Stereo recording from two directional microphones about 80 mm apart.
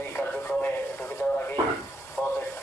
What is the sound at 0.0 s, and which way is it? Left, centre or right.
Radio, left.